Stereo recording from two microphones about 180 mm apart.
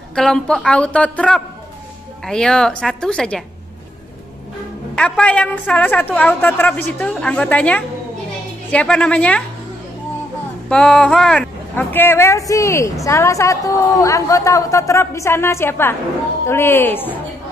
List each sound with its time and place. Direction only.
0.1 s a woman's voice: 5° left (ahead or behind)
4.9 s speech: 5° left (ahead or behind)
10.7 s speech: 5° left (ahead or behind)